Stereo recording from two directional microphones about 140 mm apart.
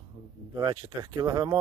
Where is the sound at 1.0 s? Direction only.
30° right (ahead or behind).